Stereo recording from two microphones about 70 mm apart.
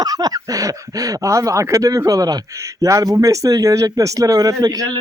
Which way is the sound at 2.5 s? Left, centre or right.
Right.